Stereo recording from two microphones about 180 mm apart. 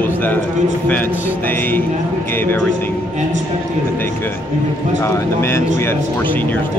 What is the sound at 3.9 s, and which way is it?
Speech, 10° left (ahead or behind).